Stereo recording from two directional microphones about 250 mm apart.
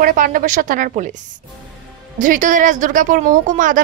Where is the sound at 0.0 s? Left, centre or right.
Right.